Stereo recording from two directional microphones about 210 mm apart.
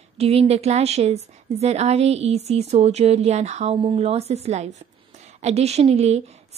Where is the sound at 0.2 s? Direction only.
30° right (ahead or behind).